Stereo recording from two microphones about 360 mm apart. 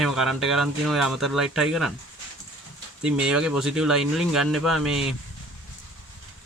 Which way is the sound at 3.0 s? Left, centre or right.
Centre.